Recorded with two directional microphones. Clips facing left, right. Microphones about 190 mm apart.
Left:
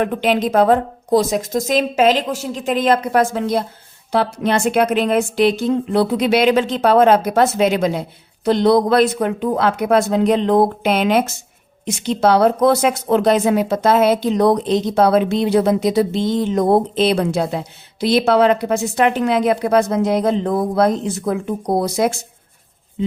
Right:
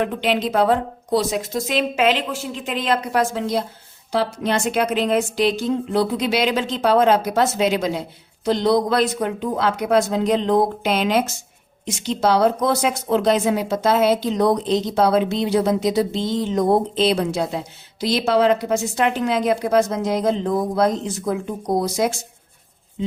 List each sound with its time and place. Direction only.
0.0 s a woman's voice: 50° left (ahead or behind)